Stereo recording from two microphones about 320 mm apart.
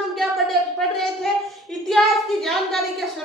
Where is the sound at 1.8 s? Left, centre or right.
Centre.